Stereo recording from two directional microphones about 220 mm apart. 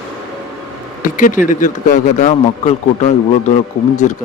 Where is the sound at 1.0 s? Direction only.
35° left (ahead or behind).